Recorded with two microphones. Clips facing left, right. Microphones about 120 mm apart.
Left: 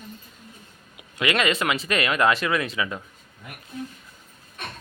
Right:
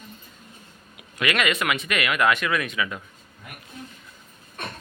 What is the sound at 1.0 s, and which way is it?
Speech, 25° left (ahead or behind).